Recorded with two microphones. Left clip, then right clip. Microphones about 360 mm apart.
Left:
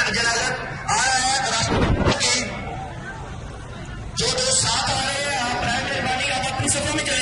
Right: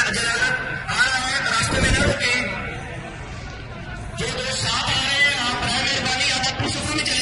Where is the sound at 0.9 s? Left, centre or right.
Centre.